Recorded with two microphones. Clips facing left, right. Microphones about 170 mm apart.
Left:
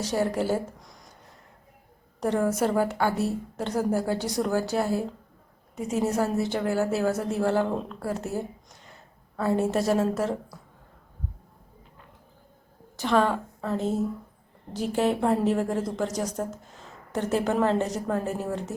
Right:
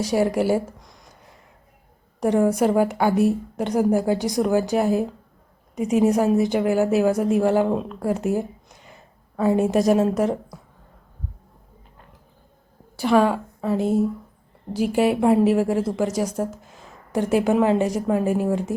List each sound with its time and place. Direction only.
0.0 s a woman's voice: 10° right (ahead or behind)
2.2 s a woman's voice: 15° right (ahead or behind)
13.0 s a woman's voice: 10° right (ahead or behind)